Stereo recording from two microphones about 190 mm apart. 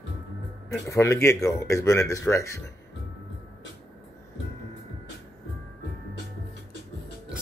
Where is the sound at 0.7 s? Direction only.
15° left (ahead or behind).